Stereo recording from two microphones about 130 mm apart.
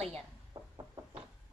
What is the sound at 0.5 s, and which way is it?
Knock, 25° right (ahead or behind).